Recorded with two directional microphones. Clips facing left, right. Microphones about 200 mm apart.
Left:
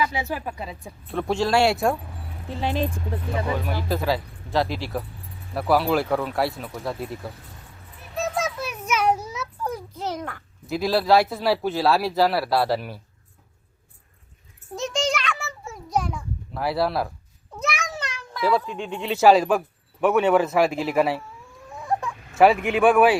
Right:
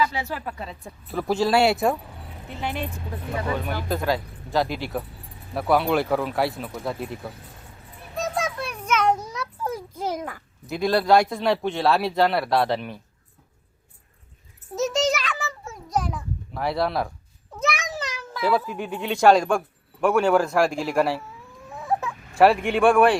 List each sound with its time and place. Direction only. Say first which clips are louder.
0.0 s speech: even; 15° left (ahead or behind); by 2.0 s centre (ahead or behind)
2.5 s speech: left 5 dB; 35° left (ahead or behind)
3.6 s speech: left 1 dB; centre (ahead or behind)
8.1 s a sound: left 1 dB; centre (ahead or behind)
9.6 s a child's voice: right 1 dB; 10° right (ahead or behind)
14.8 s a sound: right 3 dB; 5° right (ahead or behind)
17.6 s speech: right 2 dB; centre (ahead or behind)